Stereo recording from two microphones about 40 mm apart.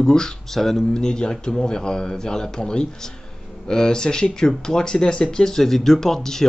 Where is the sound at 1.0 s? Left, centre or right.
Centre.